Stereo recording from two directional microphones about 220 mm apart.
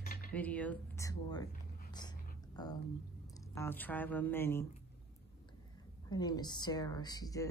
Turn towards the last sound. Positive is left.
turn(degrees=15)  # may be behind; listen again after turning